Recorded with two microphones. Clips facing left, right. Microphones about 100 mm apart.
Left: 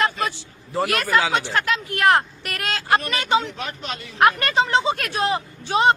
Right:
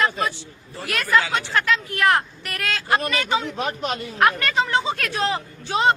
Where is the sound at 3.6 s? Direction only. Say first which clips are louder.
Right 5 dB; 40° right (ahead or behind).